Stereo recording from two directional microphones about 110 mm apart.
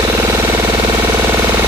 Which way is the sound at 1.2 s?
15° right (ahead or behind).